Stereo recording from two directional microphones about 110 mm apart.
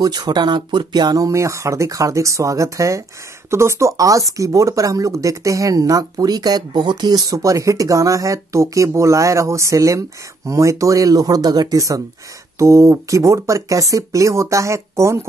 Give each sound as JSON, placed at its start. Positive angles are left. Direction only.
{"t": 0.0, "sound": "speech", "side_deg": -40}